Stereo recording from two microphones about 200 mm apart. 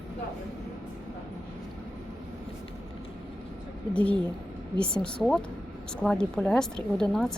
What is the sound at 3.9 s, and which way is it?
A woman's voice, 5° left (ahead or behind).